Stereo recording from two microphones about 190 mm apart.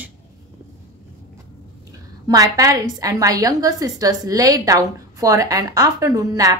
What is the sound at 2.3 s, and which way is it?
A woman's voice, 20° right (ahead or behind).